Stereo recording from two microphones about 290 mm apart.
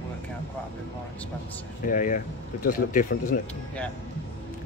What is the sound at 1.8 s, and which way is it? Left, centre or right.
Speech, left.